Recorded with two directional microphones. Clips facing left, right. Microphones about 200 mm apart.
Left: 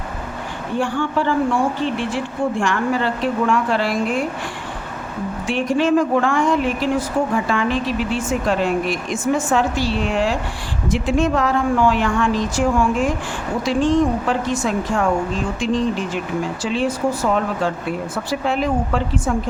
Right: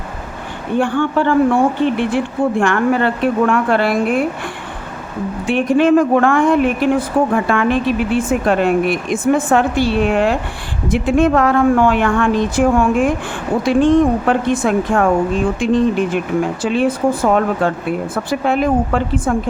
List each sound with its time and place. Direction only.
0.8 s a woman's voice: 55° right (ahead or behind)
5.5 s a woman's voice: 55° right (ahead or behind)